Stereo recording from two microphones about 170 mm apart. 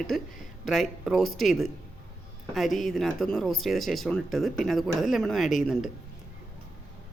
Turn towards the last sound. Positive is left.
turn(degrees=0)  # may be behind; listen again after turning